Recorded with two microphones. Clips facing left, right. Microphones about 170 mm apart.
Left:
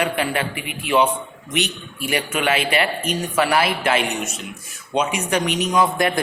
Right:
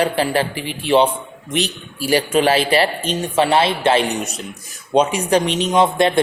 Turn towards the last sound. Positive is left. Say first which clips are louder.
# right 4 dB
turn(degrees=-25)  # may be behind; listen again after turning